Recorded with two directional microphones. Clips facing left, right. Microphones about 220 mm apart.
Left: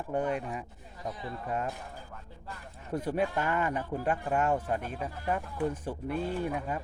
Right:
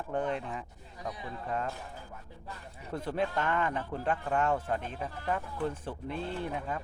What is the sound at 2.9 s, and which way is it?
Speech, 15° left (ahead or behind).